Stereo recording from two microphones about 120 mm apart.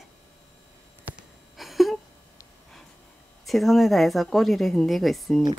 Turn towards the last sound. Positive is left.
turn(degrees=0)  # may be behind; listen again after turning